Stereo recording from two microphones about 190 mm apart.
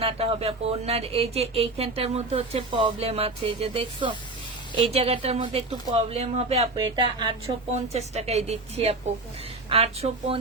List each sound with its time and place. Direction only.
0.0 s a woman's voice: 30° right (ahead or behind)
7.9 s a woman's voice: 35° right (ahead or behind)